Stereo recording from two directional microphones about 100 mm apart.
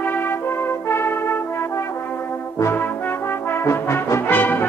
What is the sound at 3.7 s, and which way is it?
Brass instrument, 25° left (ahead or behind).